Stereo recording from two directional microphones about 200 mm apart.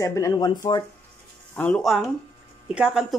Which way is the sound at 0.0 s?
15° left (ahead or behind).